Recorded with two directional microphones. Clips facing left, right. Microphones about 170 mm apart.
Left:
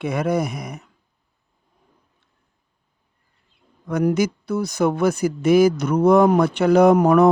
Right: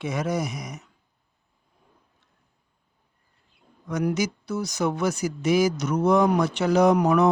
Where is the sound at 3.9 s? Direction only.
55° left (ahead or behind).